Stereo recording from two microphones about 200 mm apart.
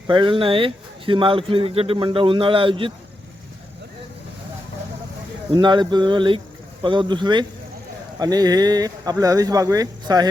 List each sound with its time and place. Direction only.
0.1 s a man's voice: 25° right (ahead or behind)
5.5 s a man's voice: 20° right (ahead or behind)